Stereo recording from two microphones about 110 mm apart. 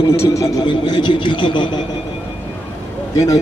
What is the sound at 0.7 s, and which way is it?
Speech, 45° left (ahead or behind).